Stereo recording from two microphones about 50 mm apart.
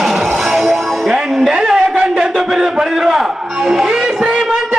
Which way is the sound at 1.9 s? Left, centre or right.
Centre.